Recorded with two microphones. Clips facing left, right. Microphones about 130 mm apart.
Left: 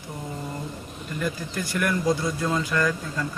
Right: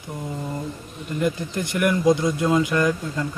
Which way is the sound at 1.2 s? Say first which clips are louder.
Right 5 dB; 20° right (ahead or behind).